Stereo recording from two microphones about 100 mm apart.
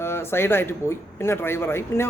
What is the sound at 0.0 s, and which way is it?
Speech, 25° left (ahead or behind).